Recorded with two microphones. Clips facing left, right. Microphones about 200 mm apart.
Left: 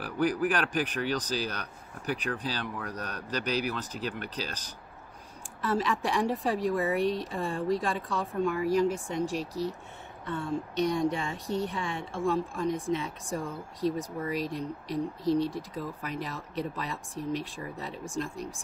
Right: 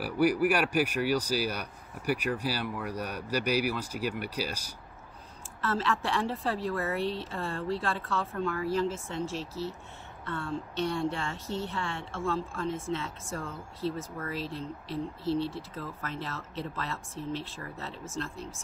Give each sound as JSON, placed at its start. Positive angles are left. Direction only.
{"t": 0.0, "sound": "speech", "side_deg": -10}
{"t": 5.6, "sound": "a woman's voice", "side_deg": 15}